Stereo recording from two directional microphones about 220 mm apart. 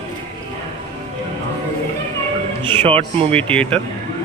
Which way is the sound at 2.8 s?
25° right (ahead or behind).